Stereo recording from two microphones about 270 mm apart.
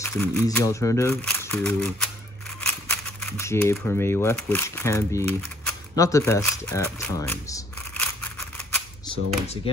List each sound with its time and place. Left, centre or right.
0.0 s speech: centre
2.6 s a sound: centre
3.7 s speech: centre
9.0 s speech: centre